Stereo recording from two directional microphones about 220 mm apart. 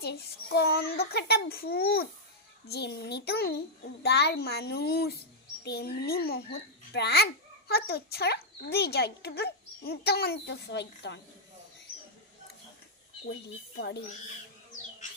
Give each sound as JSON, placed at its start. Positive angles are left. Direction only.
{"t": 0.0, "sound": "speech", "side_deg": 50}
{"t": 13.2, "sound": "speech", "side_deg": 45}